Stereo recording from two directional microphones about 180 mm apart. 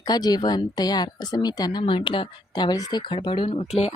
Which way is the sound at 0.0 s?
20° left (ahead or behind).